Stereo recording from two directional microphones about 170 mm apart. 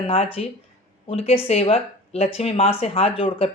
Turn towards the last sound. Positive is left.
turn(degrees=30)  # may be behind; listen again after turning